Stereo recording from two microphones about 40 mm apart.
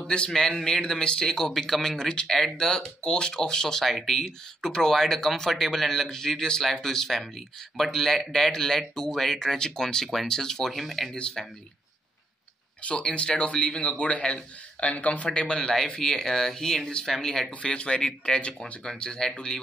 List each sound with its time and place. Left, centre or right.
0.0 s a man's voice: left; by 4.2 s centre
4.2 s speech: centre
10.7 s speech: centre
13.4 s a man's voice: left
16.0 s speech: centre
17.0 s speech: centre
17.5 s a man's voice: left